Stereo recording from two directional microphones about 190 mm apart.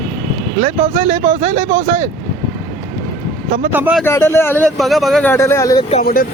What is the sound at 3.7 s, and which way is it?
Speech, 5° right (ahead or behind).